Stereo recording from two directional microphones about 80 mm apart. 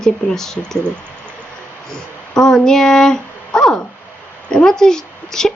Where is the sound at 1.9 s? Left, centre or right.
Centre.